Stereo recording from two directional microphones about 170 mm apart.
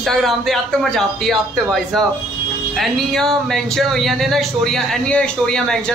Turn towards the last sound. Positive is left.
turn(degrees=5)  # may be behind; listen again after turning